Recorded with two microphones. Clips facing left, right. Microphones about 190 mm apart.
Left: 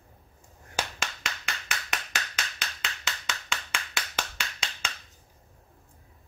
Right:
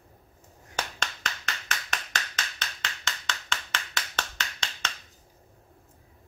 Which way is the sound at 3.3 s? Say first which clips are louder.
Right 1 dB; 10° left (ahead or behind).